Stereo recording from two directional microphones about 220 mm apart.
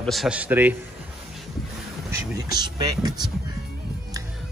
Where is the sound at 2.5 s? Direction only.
20° right (ahead or behind).